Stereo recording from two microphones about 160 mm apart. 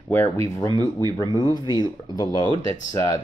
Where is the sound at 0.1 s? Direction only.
15° left (ahead or behind).